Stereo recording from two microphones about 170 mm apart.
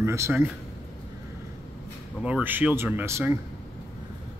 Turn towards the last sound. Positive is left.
turn(degrees=-15)  # may be behind; listen again after turning